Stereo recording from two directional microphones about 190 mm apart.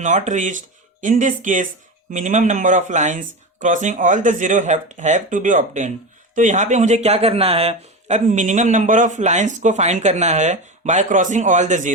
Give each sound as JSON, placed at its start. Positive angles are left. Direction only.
{"t": 0.0, "sound": "speech", "side_deg": -40}